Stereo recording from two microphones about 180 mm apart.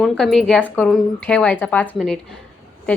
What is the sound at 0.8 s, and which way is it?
A woman's voice, 5° left (ahead or behind).